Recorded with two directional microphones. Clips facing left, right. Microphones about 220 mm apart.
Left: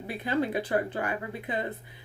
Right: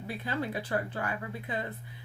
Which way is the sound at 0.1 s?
20° left (ahead or behind).